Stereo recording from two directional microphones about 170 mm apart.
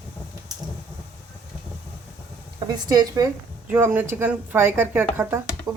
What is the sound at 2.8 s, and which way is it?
Speech, 20° right (ahead or behind).